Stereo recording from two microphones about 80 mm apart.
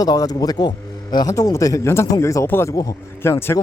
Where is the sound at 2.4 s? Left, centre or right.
Left.